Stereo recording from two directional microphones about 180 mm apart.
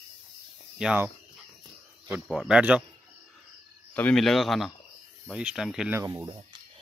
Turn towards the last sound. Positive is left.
turn(degrees=-20)  # may be behind; listen again after turning